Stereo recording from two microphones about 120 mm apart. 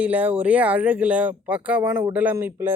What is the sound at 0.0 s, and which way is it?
Speech, 15° right (ahead or behind).